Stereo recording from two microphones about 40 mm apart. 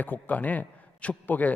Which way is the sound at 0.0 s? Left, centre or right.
Left.